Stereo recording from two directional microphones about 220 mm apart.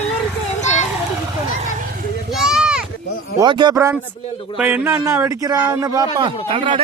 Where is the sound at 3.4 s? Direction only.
20° right (ahead or behind).